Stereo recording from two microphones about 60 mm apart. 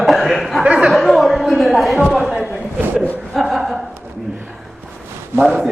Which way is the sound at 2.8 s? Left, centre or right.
Right.